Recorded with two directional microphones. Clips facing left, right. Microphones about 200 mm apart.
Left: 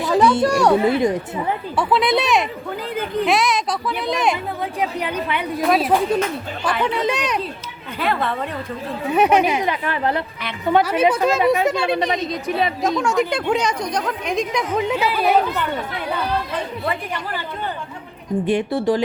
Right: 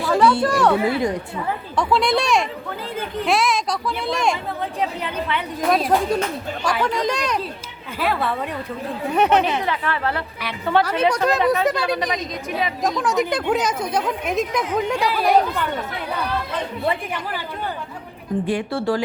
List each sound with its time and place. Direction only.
0.0 s speech: 15° left (ahead or behind)
1.7 s a woman's voice: 5° left (ahead or behind)
4.8 s a woman's voice: 15° left (ahead or behind)
7.9 s a woman's voice: 5° right (ahead or behind)
9.0 s a woman's voice: 10° left (ahead or behind)
11.9 s a woman's voice: 30° left (ahead or behind)
13.0 s a woman's voice: centre (ahead or behind)
18.4 s speech: 20° left (ahead or behind)